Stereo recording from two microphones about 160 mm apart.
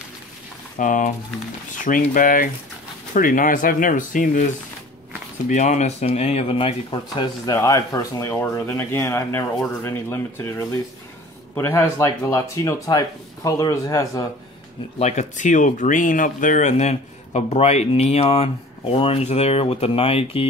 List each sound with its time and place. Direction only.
0.7 s speech: 55° left (ahead or behind)
5.5 s speech: 45° left (ahead or behind); by 14.2 s 20° left (ahead or behind)
15.0 s speech: 45° left (ahead or behind)